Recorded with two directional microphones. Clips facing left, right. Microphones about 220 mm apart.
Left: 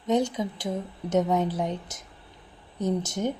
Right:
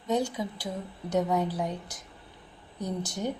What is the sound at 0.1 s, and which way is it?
A woman's voice, 20° left (ahead or behind).